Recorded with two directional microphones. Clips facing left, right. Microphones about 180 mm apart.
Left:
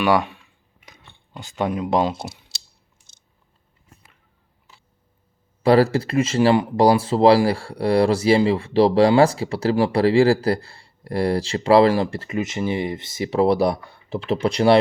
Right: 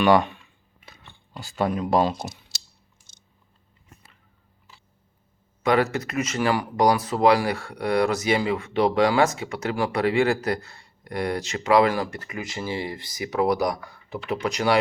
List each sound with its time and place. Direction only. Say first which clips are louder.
0.0 s speech: right 1 dB; 10° left (ahead or behind)
0.9 s a sound: even; 20° left (ahead or behind)
5.6 s speech: left 6 dB; 30° left (ahead or behind)